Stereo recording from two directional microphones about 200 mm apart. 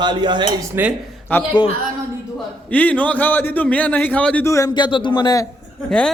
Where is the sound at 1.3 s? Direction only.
10° left (ahead or behind).